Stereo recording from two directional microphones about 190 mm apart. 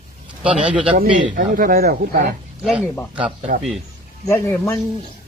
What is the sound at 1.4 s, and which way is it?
Speech, 50° right (ahead or behind).